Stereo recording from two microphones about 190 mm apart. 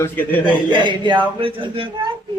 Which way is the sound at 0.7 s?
25° right (ahead or behind).